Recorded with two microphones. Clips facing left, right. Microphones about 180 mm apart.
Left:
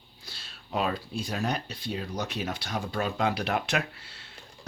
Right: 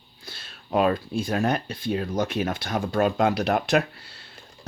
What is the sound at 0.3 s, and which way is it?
Speech, 50° right (ahead or behind).